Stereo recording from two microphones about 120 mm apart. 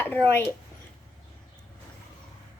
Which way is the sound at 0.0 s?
15° left (ahead or behind).